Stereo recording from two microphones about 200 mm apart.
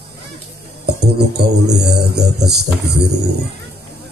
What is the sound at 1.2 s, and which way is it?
Music, 55° right (ahead or behind).